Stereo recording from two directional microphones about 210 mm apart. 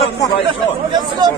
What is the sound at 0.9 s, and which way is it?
Speech, 20° right (ahead or behind).